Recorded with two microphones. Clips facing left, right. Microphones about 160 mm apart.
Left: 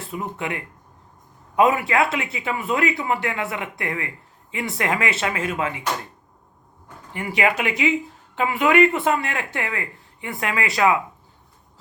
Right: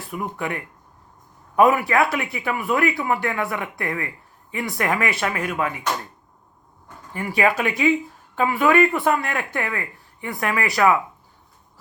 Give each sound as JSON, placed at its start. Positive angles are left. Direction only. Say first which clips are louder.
{"t": 0.0, "sound": "speech", "louder": "right 1 dB", "side_deg": 25}
{"t": 7.1, "sound": "speech", "louder": "right 1 dB", "side_deg": 20}